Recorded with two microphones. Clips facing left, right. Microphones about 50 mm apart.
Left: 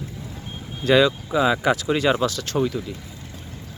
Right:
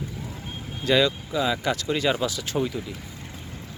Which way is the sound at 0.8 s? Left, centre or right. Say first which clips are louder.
Left 4 dB; centre.